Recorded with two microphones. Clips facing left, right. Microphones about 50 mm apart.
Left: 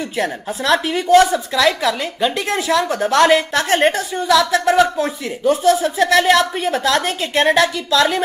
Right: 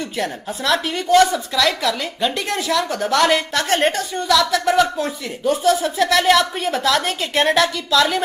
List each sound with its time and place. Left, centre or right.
0.2 s a woman's voice: centre